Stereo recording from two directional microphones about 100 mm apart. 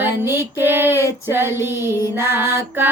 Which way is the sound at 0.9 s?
30° left (ahead or behind).